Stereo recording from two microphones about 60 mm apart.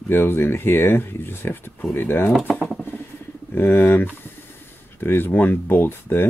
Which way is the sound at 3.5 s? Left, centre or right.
Left.